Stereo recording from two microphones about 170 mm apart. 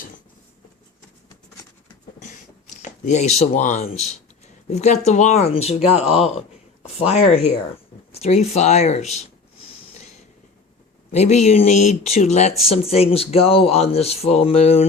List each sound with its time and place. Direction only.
2.1 s a sound: 50° left (ahead or behind)
4.7 s speech: 40° left (ahead or behind)
11.1 s speech: 40° left (ahead or behind)